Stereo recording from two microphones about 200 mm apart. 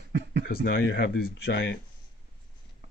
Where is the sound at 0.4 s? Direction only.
55° left (ahead or behind).